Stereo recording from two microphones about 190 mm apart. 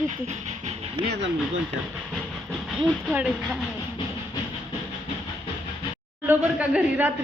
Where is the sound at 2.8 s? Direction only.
5° right (ahead or behind).